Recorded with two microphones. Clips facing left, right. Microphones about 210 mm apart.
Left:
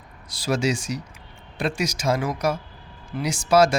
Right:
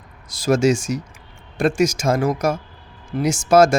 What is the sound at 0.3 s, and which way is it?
A man's voice, 45° right (ahead or behind).